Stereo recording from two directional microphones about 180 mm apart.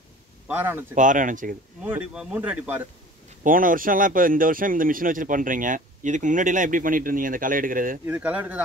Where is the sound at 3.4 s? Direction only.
50° right (ahead or behind).